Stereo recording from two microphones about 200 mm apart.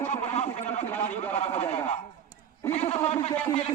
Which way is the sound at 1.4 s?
30° left (ahead or behind).